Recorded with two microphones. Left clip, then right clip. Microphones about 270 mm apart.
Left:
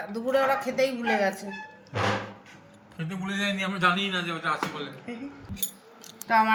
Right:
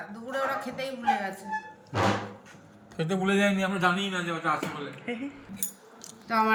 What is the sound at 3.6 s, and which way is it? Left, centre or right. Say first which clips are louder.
Speech: left 2 dB; right.